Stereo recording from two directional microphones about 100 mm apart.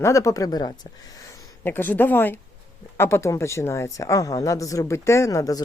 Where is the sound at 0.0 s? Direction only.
30° left (ahead or behind).